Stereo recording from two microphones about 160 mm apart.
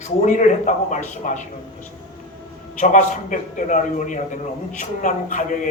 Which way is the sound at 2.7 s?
50° left (ahead or behind).